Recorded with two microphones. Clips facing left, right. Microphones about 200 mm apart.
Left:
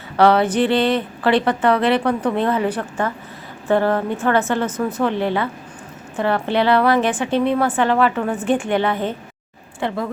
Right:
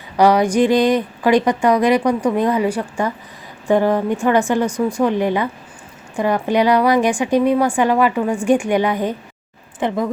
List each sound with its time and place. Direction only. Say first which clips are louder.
0.2 s a woman's voice: right 1 dB; 15° right (ahead or behind)